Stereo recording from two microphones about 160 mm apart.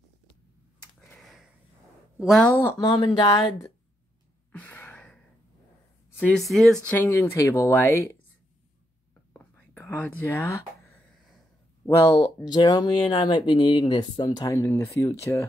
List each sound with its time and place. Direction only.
1.2 s sniff: centre (ahead or behind)
2.1 s a woman's voice: centre (ahead or behind)
2.8 s speech: 25° left (ahead or behind)
4.5 s gasp: 10° left (ahead or behind)
6.0 s speech: 10° left (ahead or behind)
7.0 s speech: 15° left (ahead or behind)
9.3 s whispering: 10° left (ahead or behind)
11.8 s speech: 15° left (ahead or behind)